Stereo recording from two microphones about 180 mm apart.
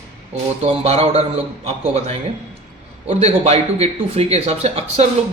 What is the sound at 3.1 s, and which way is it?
Speech, 35° right (ahead or behind).